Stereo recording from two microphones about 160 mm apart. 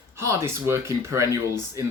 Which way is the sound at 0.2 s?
20° right (ahead or behind).